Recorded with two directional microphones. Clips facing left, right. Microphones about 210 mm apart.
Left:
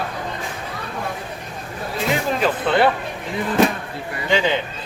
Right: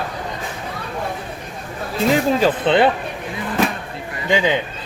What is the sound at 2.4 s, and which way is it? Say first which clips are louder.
Speech: right 3 dB; 20° right (ahead or behind).